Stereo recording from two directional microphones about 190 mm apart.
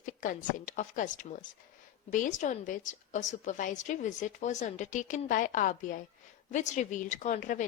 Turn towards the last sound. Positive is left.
turn(degrees=40)  # may be behind; listen again after turning